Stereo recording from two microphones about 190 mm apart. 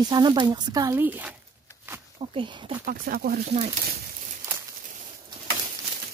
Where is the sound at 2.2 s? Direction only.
25° right (ahead or behind).